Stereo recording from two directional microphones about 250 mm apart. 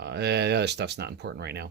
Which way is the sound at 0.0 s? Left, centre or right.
Right.